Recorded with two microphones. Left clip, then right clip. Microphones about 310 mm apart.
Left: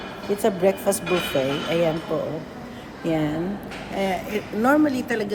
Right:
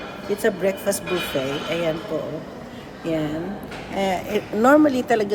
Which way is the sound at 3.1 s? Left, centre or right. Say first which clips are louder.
Left 1 dB; centre.